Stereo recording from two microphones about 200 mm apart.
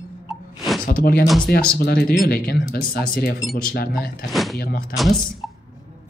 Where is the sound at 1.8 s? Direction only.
50° left (ahead or behind).